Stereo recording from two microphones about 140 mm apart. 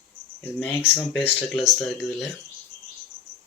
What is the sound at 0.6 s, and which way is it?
Speech, 15° left (ahead or behind).